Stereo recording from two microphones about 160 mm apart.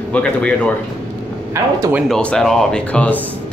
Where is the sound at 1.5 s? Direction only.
20° right (ahead or behind).